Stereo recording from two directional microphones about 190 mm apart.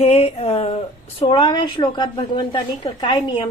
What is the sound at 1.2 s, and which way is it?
A woman's voice, 20° left (ahead or behind).